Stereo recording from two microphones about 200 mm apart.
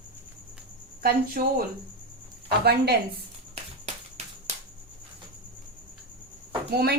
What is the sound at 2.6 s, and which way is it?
Speech, 55° right (ahead or behind).